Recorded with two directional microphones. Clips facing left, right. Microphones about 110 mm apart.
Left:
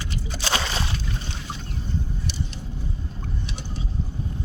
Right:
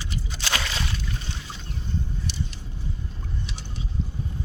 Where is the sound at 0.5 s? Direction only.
30° left (ahead or behind).